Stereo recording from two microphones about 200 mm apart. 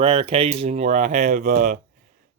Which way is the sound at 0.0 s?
25° right (ahead or behind).